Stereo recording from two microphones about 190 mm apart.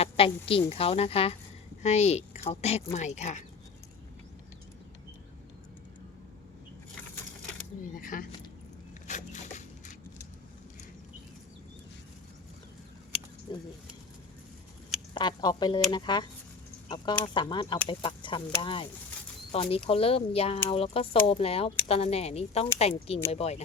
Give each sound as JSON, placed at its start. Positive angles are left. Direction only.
{"t": 0.0, "sound": "a woman's voice", "side_deg": 30}
{"t": 7.9, "sound": "speech", "side_deg": 45}
{"t": 9.0, "sound": "zipper", "side_deg": 40}
{"t": 13.5, "sound": "speech", "side_deg": 25}
{"t": 15.1, "sound": "speech", "side_deg": 25}
{"t": 17.2, "sound": "speech", "side_deg": 25}